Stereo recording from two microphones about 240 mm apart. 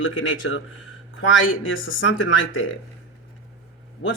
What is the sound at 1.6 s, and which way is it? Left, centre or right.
Speech, left.